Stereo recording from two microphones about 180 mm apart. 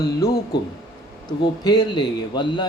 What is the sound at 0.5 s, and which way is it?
Speech, 70° left (ahead or behind).